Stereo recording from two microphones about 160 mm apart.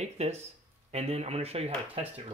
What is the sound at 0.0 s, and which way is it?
Speech, 45° right (ahead or behind).